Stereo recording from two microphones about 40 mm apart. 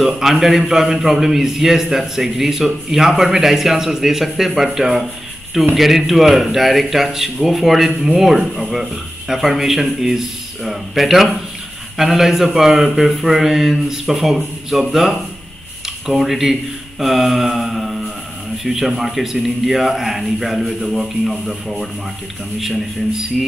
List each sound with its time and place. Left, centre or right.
0.0 s a man's voice: centre
17.0 s mantra: centre
18.6 s a man's voice: centre